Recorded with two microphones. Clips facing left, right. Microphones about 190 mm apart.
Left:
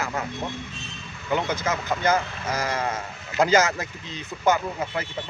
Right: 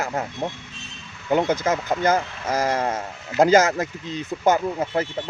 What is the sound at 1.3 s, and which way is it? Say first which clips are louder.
Speech: right 5 dB; 45° right (ahead or behind).